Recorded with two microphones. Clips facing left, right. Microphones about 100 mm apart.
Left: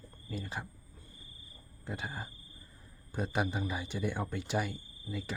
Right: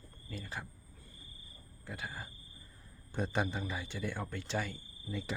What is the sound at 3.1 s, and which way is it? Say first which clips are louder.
Speech: left 1 dB; 5° left (ahead or behind).